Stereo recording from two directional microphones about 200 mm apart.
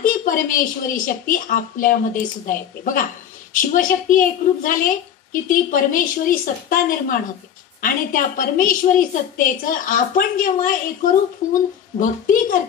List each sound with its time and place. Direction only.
0.0 s a woman's voice: 45° left (ahead or behind)